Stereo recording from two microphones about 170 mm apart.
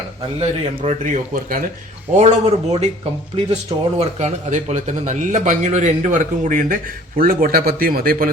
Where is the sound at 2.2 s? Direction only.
40° right (ahead or behind).